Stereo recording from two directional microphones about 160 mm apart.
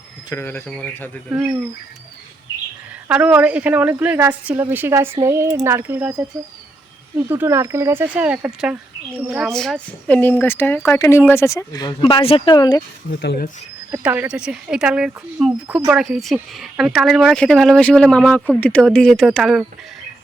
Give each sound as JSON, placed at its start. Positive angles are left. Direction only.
{"t": 0.3, "sound": "speech", "side_deg": 15}
{"t": 1.3, "sound": "speech", "side_deg": -10}
{"t": 3.1, "sound": "speech", "side_deg": -10}
{"t": 7.3, "sound": "speech", "side_deg": -15}
{"t": 11.9, "sound": "speech", "side_deg": 35}
{"t": 13.1, "sound": "speech", "side_deg": 75}
{"t": 13.9, "sound": "speech", "side_deg": -10}